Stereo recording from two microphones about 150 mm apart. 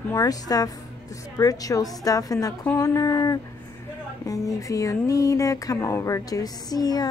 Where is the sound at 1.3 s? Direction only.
25° left (ahead or behind).